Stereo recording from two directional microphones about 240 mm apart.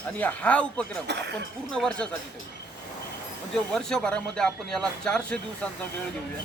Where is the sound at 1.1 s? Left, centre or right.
Right.